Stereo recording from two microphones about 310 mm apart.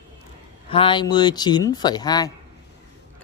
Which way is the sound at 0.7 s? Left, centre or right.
Centre.